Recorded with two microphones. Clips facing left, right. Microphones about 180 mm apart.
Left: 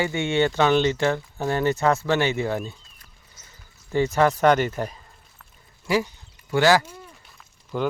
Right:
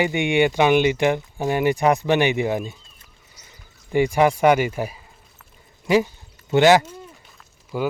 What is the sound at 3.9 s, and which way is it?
Speech, 15° right (ahead or behind).